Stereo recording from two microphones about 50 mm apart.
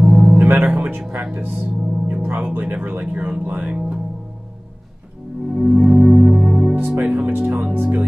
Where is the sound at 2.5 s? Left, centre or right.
Right.